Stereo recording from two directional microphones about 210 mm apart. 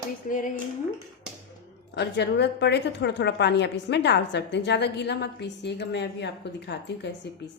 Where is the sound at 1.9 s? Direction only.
55° left (ahead or behind).